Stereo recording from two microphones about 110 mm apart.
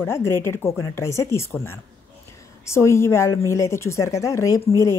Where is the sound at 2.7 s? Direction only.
25° left (ahead or behind).